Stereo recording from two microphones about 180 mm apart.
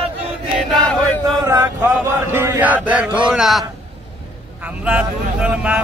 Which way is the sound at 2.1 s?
15° right (ahead or behind).